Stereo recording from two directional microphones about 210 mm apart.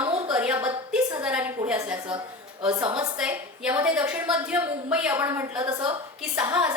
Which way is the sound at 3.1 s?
5° right (ahead or behind).